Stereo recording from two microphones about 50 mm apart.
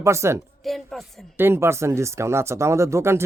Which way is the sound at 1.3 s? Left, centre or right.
Right.